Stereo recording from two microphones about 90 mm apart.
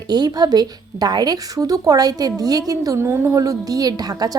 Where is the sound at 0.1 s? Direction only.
50° right (ahead or behind).